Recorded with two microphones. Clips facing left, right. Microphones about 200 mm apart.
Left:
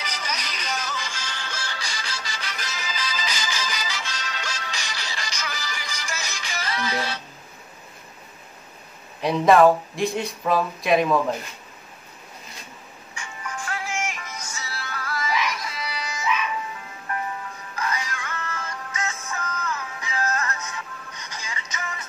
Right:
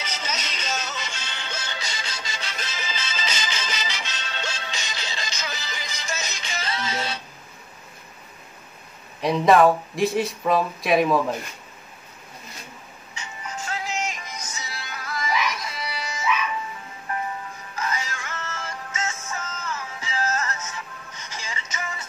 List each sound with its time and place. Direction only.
0.0 s music: 25° right (ahead or behind)
9.2 s speech: centre (ahead or behind)
13.1 s music: 20° right (ahead or behind)
17.7 s music: 25° right (ahead or behind)